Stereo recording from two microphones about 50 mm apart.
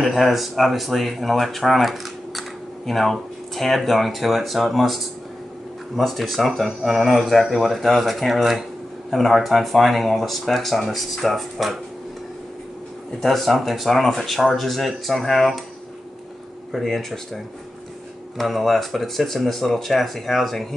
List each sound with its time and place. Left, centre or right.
0.0 s speech: centre
13.2 s speech: centre
16.7 s speech: centre
18.4 s speech: centre